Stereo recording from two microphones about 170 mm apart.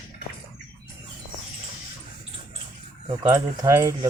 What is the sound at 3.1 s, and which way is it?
Speech, 20° right (ahead or behind).